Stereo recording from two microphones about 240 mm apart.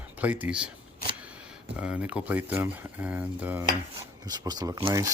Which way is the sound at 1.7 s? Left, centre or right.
Centre.